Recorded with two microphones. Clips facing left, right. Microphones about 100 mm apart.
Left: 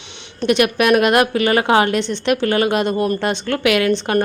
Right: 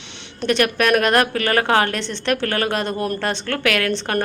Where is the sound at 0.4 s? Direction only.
10° left (ahead or behind).